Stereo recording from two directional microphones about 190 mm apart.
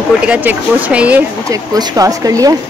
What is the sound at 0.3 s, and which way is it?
Speech, 10° right (ahead or behind).